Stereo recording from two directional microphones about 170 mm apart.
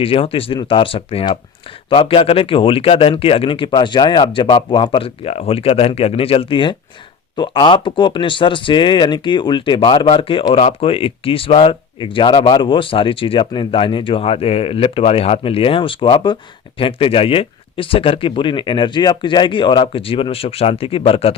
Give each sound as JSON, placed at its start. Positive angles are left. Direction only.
{"t": 0.0, "sound": "speech", "side_deg": 35}